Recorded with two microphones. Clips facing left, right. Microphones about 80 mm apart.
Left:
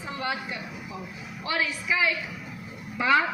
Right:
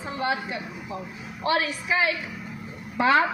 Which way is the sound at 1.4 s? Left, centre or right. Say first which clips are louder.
Right 4 dB; right.